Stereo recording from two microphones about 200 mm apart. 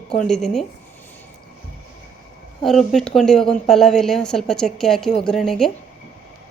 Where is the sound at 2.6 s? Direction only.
Centre (ahead or behind).